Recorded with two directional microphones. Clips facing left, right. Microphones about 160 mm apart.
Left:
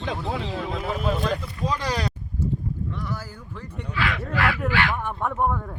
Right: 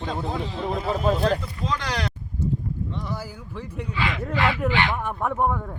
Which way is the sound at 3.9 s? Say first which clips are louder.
Even; 25° right (ahead or behind).